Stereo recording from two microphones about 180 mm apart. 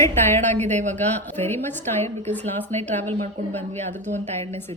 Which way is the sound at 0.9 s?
10° left (ahead or behind).